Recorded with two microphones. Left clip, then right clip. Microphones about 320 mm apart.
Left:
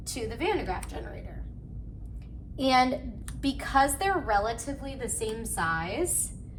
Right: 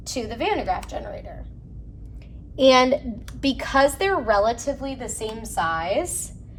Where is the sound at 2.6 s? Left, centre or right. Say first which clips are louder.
Right 8 dB; right.